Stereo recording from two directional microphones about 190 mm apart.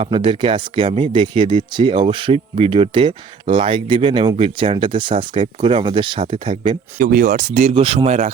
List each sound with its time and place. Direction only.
0.0 s speech: 30° right (ahead or behind)
7.0 s speech: 50° right (ahead or behind)